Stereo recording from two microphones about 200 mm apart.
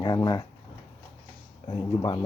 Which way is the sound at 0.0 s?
20° left (ahead or behind).